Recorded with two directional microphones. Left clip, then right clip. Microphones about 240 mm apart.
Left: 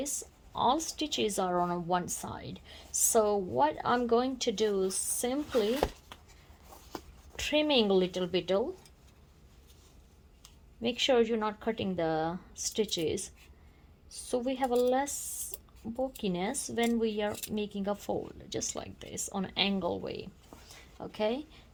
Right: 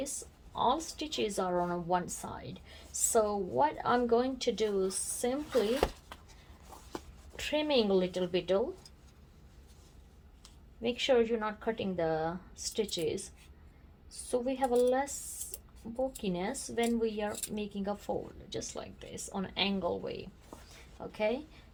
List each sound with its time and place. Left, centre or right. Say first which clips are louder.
0.5 s a woman's voice: left 2 dB; left
7.3 s a woman's voice: left 2 dB; left
10.8 s a woman's voice: left 1 dB; left